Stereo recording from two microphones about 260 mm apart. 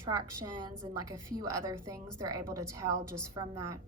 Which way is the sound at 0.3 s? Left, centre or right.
Right.